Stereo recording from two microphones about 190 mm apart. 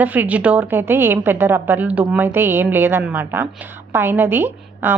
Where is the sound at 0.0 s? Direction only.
10° right (ahead or behind).